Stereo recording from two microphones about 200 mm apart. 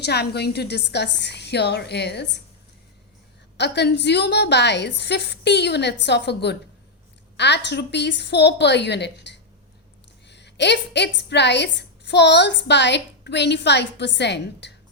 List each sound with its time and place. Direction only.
0.0 s a woman's voice: 55° left (ahead or behind)
3.6 s a woman's voice: 60° left (ahead or behind)